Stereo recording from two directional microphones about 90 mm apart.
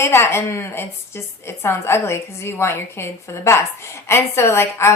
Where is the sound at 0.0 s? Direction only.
25° left (ahead or behind).